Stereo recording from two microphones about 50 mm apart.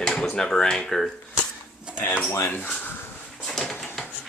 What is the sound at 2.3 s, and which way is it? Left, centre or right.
Speech, left.